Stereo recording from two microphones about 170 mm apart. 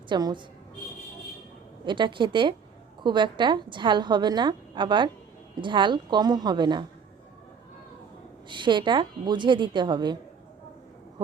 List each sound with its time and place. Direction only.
0.1 s a woman's voice: 25° right (ahead or behind)
1.8 s a woman's voice: 25° right (ahead or behind)
8.4 s a woman's voice: 25° right (ahead or behind)